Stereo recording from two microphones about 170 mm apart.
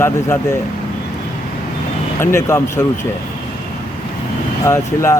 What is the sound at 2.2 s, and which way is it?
Speech, 15° left (ahead or behind).